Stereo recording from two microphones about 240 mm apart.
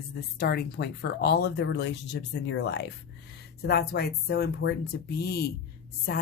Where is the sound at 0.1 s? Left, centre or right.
Left.